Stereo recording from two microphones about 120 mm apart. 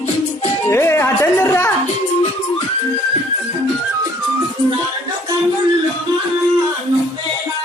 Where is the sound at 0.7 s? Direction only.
20° left (ahead or behind).